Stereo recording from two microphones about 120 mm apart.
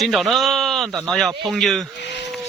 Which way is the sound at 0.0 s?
Centre (ahead or behind).